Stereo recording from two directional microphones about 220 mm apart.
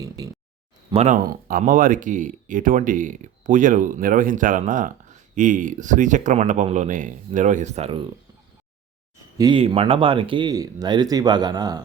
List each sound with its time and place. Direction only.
0.9 s speech: 30° right (ahead or behind)
9.4 s speech: 25° right (ahead or behind)